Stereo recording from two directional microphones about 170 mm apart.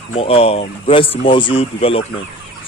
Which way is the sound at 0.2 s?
35° left (ahead or behind).